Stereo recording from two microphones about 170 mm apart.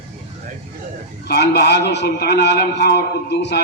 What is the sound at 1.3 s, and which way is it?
A man's voice, 75° left (ahead or behind).